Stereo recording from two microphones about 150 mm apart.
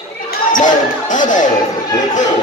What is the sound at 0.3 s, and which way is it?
Basketball bounce, 60° left (ahead or behind).